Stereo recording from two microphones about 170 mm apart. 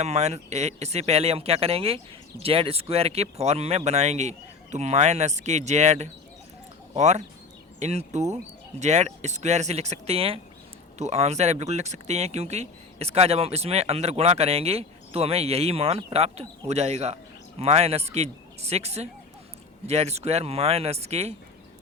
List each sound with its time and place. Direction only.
0.0 s speech: 40° right (ahead or behind)